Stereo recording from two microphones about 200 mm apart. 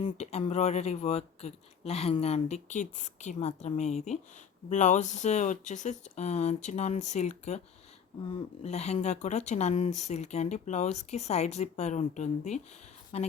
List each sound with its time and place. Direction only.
0.0 s speech: 35° left (ahead or behind)
8.6 s speech: 35° left (ahead or behind)